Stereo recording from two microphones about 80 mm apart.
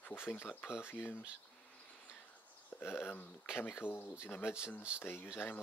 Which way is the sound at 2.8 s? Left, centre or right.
Left.